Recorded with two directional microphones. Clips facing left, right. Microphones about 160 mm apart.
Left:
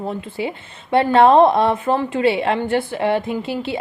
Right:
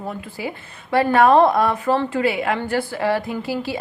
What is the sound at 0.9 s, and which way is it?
A woman's voice, 25° left (ahead or behind).